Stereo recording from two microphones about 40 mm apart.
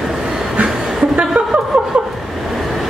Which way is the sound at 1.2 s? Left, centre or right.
Right.